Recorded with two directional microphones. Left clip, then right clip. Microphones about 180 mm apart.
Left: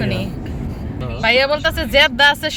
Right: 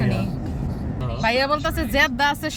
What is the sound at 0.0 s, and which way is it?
Vehicle, 5° right (ahead or behind).